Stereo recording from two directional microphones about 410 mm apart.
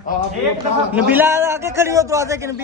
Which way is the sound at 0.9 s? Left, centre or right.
Centre.